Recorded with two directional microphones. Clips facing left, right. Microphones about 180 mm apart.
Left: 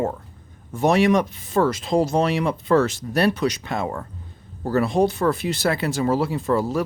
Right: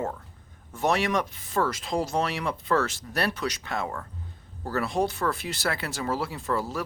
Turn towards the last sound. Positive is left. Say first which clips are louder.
# left 8 dB
turn(degrees=20)  # may be behind; listen again after turning